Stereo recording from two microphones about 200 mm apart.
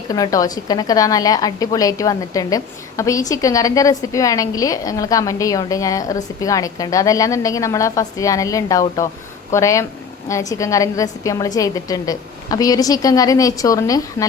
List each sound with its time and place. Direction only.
0.1 s a woman's voice: 20° left (ahead or behind)